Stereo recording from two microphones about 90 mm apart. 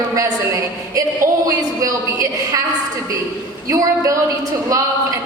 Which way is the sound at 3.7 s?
35° right (ahead or behind).